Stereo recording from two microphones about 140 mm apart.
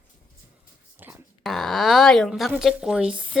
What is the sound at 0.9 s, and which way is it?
Dog, 15° right (ahead or behind).